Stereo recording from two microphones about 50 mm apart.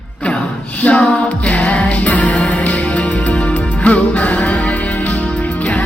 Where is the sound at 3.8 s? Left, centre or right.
Left.